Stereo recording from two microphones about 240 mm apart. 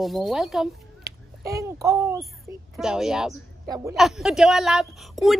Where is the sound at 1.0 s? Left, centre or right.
Centre.